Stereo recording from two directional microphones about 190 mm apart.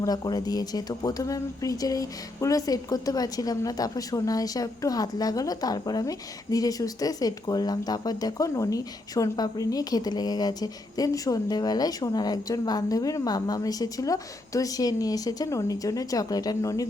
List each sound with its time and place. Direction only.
0.0 s speech: 20° left (ahead or behind)